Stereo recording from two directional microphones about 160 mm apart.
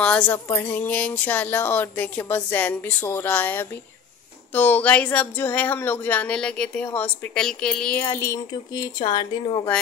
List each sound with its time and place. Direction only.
0.0 s speech: 5° left (ahead or behind)
8.0 s speech: 15° left (ahead or behind)